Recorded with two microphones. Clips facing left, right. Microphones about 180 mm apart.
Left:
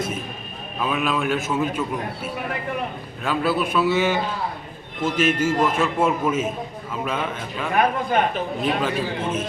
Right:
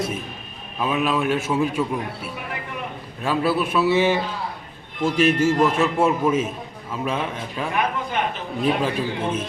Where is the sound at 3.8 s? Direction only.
30° right (ahead or behind).